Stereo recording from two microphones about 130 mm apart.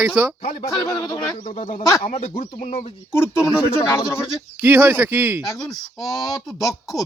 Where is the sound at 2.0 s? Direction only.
45° left (ahead or behind).